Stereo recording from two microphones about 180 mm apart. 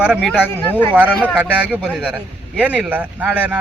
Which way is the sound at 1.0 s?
10° right (ahead or behind).